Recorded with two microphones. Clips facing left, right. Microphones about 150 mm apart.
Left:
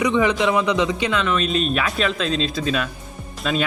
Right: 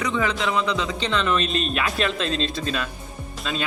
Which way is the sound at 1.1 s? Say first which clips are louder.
Left 2 dB; 5° left (ahead or behind).